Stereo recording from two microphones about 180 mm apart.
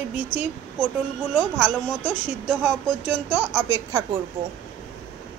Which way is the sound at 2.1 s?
5° right (ahead or behind).